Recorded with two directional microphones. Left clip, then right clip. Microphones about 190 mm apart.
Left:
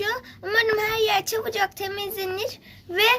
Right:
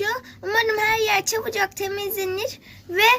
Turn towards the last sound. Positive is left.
turn(degrees=0)  # may be behind; listen again after turning